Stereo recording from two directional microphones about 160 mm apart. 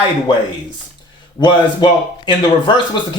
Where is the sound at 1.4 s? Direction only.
30° left (ahead or behind).